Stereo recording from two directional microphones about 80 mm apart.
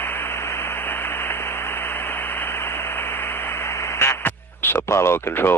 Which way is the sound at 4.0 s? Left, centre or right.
Left.